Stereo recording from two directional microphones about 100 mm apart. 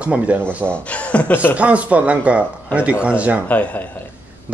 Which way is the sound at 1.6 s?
15° right (ahead or behind).